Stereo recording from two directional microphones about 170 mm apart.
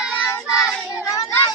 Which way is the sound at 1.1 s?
20° left (ahead or behind).